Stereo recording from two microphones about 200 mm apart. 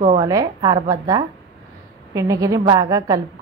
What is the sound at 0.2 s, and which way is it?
A woman's voice, 20° right (ahead or behind).